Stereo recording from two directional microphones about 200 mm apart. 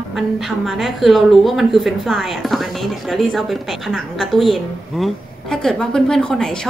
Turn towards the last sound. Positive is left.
turn(degrees=5)  # may be behind; listen again after turning